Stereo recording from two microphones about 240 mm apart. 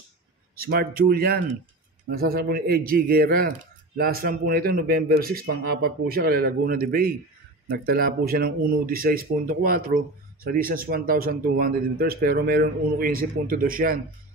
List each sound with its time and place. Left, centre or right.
0.6 s speech: right